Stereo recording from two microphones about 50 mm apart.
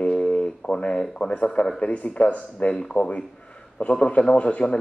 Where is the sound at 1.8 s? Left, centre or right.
Left.